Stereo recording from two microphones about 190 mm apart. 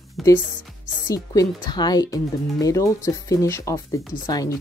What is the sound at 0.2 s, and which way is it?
Speech, centre (ahead or behind).